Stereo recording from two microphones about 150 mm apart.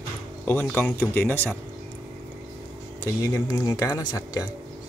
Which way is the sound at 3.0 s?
25° left (ahead or behind).